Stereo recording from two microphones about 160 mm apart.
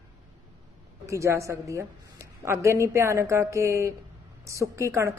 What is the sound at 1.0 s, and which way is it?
A woman's voice, 20° right (ahead or behind).